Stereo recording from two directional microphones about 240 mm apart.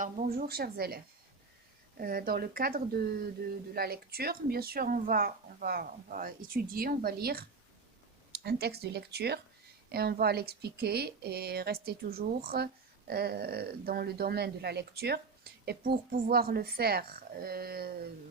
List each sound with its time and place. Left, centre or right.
0.0 s speech: right